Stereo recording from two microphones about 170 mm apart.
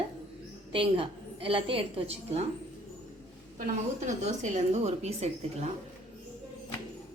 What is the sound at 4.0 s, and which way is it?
A woman's voice, 45° right (ahead or behind).